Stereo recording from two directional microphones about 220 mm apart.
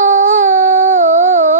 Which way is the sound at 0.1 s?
35° right (ahead or behind).